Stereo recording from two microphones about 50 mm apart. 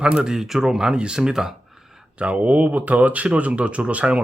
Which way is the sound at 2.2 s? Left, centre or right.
Right.